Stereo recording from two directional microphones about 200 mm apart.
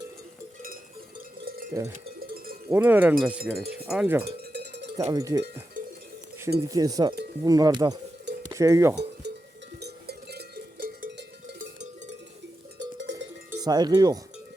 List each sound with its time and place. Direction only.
1.7 s speech: 15° right (ahead or behind)
4.5 s cowbell: 55° right (ahead or behind)
4.9 s speech: 15° right (ahead or behind)
6.6 s cowbell: 15° right (ahead or behind)
9.2 s cowbell: 55° right (ahead or behind)
11.6 s music: 35° right (ahead or behind)
13.0 s cowbell: 65° right (ahead or behind)
13.5 s cowbell: 20° right (ahead or behind)